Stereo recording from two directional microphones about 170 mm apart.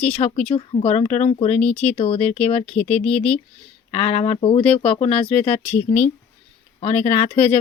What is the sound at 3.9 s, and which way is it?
Speech, 35° left (ahead or behind).